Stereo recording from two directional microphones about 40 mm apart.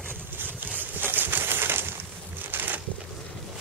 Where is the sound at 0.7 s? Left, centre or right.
Right.